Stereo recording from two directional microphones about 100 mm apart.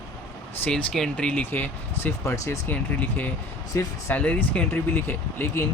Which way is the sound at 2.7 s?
15° left (ahead or behind).